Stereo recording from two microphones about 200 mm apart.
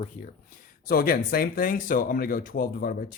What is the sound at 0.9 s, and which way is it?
Speech, 45° left (ahead or behind).